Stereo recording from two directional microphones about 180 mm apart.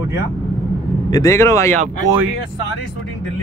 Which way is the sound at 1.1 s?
15° left (ahead or behind).